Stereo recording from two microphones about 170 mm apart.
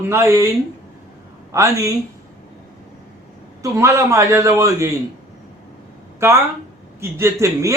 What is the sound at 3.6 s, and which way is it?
Speech, 15° right (ahead or behind).